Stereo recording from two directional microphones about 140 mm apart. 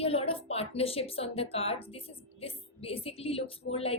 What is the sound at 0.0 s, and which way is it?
Speech, 45° left (ahead or behind).